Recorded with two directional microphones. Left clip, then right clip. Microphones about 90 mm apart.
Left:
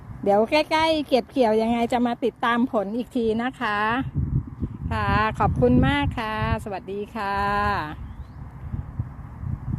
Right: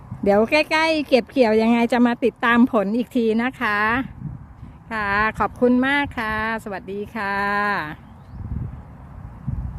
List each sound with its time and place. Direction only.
0.3 s speech: 60° right (ahead or behind); by 3.2 s 85° right
3.2 s speech: 55° right (ahead or behind)
4.9 s speech: 30° right (ahead or behind)